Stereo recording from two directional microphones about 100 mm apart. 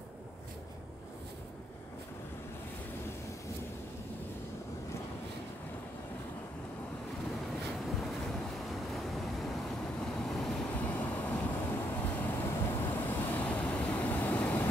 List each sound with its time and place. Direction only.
8.0 s waves: centre (ahead or behind)
10.7 s vehicle: 15° left (ahead or behind)